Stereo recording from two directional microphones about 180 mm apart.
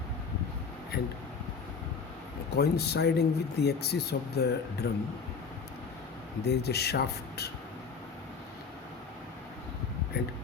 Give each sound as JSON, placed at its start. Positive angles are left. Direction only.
{"t": 2.5, "sound": "speech", "side_deg": 65}
{"t": 6.4, "sound": "speech", "side_deg": 65}